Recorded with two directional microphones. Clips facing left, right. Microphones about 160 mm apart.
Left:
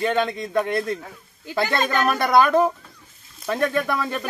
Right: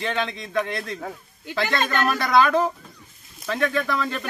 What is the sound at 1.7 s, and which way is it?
Speech, 5° left (ahead or behind).